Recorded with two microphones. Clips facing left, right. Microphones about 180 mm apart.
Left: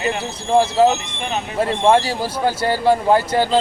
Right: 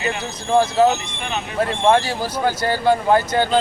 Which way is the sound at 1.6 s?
30° left (ahead or behind).